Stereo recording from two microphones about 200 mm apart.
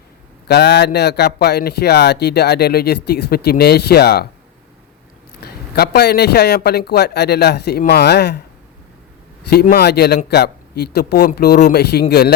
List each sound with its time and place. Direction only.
0.4 s speech: 55° left (ahead or behind)
5.4 s speech: 50° left (ahead or behind)
9.5 s a man's voice: 55° left (ahead or behind)